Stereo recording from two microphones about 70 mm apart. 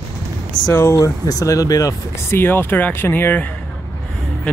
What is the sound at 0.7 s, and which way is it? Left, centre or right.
Speech, left.